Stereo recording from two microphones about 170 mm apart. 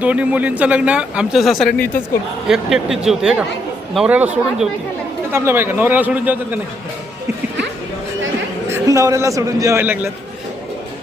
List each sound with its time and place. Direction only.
0.0 s speech: 10° right (ahead or behind)
8.7 s speech: 20° right (ahead or behind)